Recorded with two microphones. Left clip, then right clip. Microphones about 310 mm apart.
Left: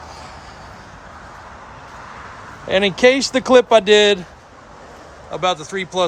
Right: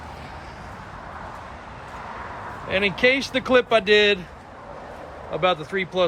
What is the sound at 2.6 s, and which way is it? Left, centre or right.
Speech, centre.